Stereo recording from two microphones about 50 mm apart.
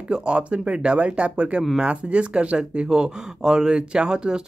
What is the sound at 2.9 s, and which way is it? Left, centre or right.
Speech, centre.